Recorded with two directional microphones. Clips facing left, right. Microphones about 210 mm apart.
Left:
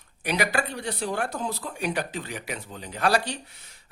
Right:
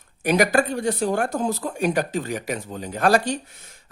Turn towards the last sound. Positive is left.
turn(degrees=-45)  # may be behind; listen again after turning